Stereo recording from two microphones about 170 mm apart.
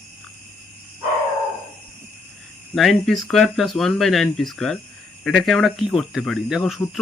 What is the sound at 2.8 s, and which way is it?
Speech, centre (ahead or behind).